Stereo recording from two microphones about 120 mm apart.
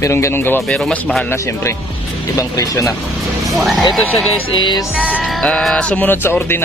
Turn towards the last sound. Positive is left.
turn(degrees=20)  # may be behind; listen again after turning